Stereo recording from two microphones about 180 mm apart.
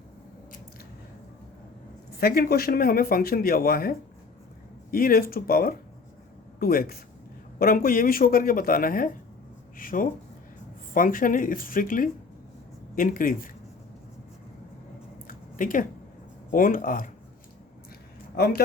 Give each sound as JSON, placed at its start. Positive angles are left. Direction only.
{"t": 2.1, "sound": "a man's voice", "side_deg": 55}
{"t": 15.3, "sound": "a sound", "side_deg": 50}
{"t": 16.5, "sound": "speech", "side_deg": 50}
{"t": 18.3, "sound": "a man's voice", "side_deg": 55}